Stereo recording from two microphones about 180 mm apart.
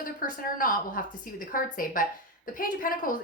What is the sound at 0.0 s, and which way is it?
Speech, 50° left (ahead or behind).